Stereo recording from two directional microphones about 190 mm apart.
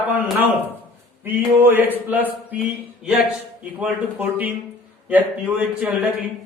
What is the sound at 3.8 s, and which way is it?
A man's voice, 10° right (ahead or behind).